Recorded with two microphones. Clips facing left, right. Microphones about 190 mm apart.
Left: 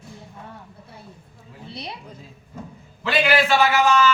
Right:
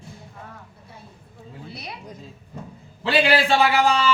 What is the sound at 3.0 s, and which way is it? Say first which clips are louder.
A man's voice: right 1 dB; 30° right (ahead or behind).